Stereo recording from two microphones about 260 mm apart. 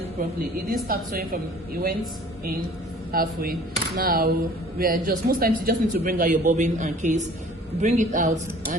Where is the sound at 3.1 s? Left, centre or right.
Right.